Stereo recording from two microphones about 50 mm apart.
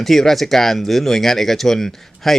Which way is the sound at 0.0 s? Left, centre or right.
Centre.